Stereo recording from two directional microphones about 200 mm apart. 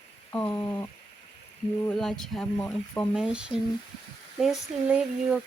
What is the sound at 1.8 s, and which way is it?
Speech, 5° left (ahead or behind).